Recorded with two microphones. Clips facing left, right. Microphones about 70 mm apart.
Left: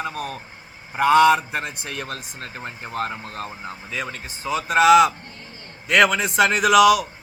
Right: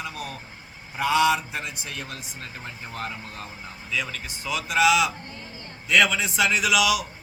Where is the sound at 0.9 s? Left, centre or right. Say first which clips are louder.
Left 6 dB; left.